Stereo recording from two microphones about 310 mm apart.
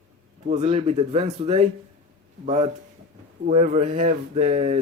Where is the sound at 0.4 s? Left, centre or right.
Right.